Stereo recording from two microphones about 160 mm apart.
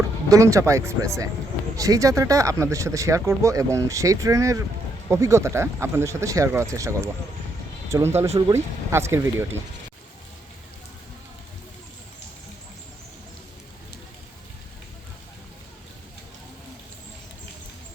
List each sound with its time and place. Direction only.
0.3 s speech: 20° right (ahead or behind)